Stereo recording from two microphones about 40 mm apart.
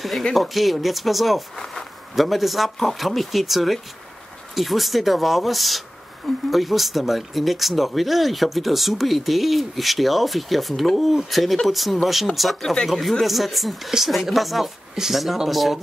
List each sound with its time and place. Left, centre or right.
0.4 s speech: centre